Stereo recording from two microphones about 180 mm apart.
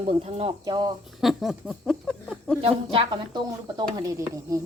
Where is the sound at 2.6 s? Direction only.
30° right (ahead or behind).